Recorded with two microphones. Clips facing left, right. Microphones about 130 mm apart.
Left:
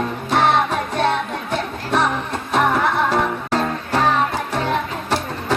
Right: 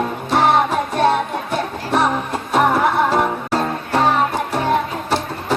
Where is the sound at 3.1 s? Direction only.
15° right (ahead or behind).